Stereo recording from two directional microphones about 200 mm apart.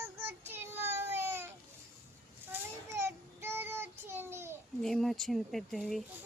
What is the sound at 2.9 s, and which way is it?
Child singing, 10° right (ahead or behind).